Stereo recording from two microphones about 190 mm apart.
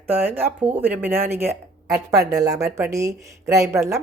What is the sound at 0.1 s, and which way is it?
Speech, 10° right (ahead or behind).